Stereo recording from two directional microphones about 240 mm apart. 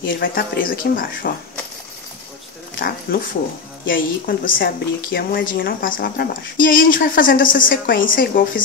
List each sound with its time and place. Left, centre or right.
0.0 s speech: left
3.1 s speech: left